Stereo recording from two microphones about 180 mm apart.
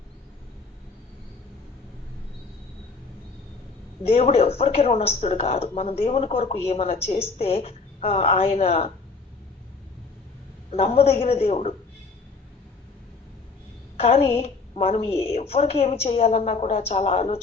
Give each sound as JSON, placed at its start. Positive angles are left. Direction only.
{"t": 4.1, "sound": "a woman's voice", "side_deg": 35}
{"t": 10.7, "sound": "a woman's voice", "side_deg": 35}
{"t": 13.9, "sound": "a woman's voice", "side_deg": 35}